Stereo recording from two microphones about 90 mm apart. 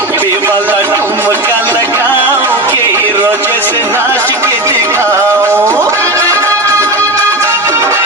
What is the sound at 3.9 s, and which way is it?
Music, 30° right (ahead or behind).